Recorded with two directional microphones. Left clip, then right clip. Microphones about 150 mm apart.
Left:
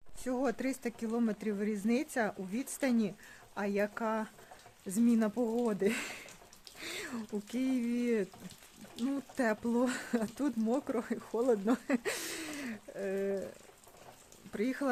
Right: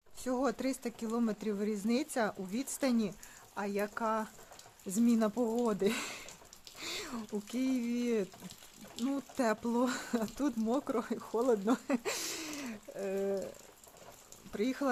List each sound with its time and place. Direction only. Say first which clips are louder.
0.3 s speech: even; 10° left (ahead or behind)
3.5 s speech: left 2 dB; 40° left (ahead or behind); by 4.3 s 25° left (ahead or behind)
4.9 s speech: even; 10° left (ahead or behind)
14.5 s speech: even; 15° left (ahead or behind)